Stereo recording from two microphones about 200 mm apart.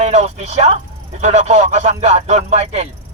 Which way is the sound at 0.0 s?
35° right (ahead or behind).